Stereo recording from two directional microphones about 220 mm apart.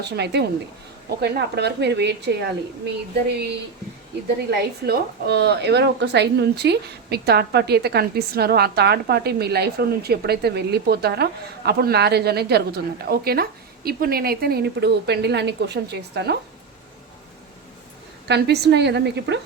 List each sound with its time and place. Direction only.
0.0 s a woman's voice: 50° right (ahead or behind)
4.9 s a woman's voice: 50° right (ahead or behind)
18.3 s a woman's voice: 50° right (ahead or behind)